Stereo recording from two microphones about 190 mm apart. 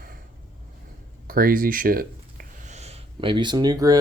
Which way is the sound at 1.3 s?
50° right (ahead or behind).